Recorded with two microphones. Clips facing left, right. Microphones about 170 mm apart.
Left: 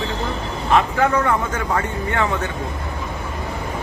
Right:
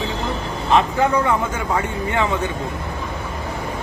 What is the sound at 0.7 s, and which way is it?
Speech, 20° right (ahead or behind).